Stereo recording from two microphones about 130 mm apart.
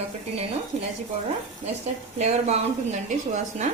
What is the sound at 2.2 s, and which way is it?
Cutlery, 55° right (ahead or behind).